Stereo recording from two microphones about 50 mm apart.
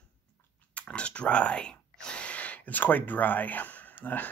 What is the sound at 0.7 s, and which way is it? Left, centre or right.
Speech, left.